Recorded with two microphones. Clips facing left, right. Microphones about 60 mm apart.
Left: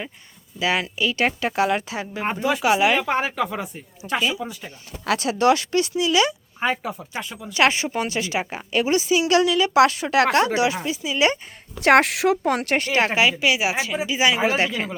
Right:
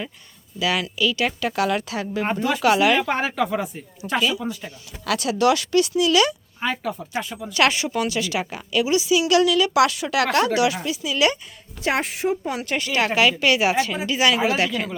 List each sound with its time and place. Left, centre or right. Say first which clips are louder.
0.6 s a woman's voice: even; left
2.2 s a woman's voice: right 1 dB; centre
3.0 s a woman's voice: even; centre
5.0 s a woman's voice: left 1 dB; left
7.2 s speech: right 3 dB; centre
7.5 s a woman's voice: even; left
11.8 s a woman's voice: left 7 dB; left
12.5 s speech: left 5 dB; left
12.7 s a woman's voice: right 2 dB; left
13.4 s a woman's voice: right 2 dB; centre; by 14.9 s left